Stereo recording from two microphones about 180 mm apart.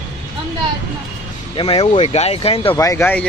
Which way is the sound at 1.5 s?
30° left (ahead or behind).